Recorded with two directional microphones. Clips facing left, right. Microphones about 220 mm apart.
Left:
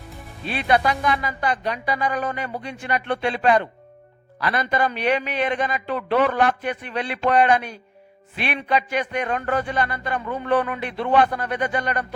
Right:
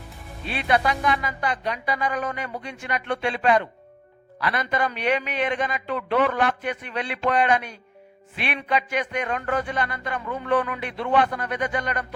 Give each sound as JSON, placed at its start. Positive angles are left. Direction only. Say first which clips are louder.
{"t": 0.4, "sound": "a man's voice", "louder": "left 2 dB", "side_deg": 40}